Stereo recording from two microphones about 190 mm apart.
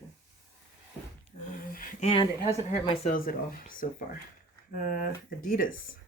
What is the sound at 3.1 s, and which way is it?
Speech, 45° left (ahead or behind).